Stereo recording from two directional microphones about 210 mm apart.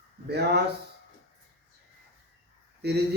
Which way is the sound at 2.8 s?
50° right (ahead or behind).